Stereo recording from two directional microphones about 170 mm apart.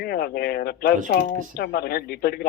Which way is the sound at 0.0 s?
65° left (ahead or behind).